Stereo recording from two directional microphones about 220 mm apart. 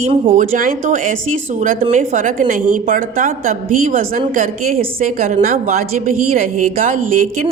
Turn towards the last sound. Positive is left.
turn(degrees=-35)  # may be behind; listen again after turning